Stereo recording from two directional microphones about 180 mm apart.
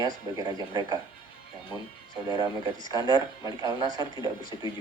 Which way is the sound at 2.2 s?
20° right (ahead or behind).